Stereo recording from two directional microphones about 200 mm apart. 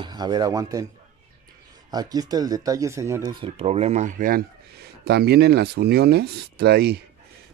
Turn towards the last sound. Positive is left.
turn(degrees=-55)  # may be behind; listen again after turning